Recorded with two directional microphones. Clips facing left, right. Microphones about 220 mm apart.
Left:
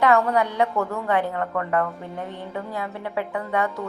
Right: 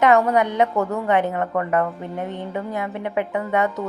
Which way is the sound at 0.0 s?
20° right (ahead or behind).